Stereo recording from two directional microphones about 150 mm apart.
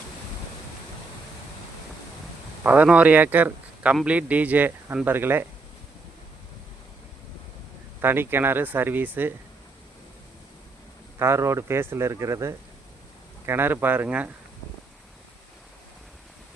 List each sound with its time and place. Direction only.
2.6 s speech: 10° right (ahead or behind)
8.0 s speech: 15° right (ahead or behind)
11.2 s speech: 20° right (ahead or behind)